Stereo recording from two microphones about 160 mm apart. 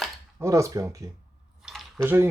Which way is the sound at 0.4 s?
20° right (ahead or behind).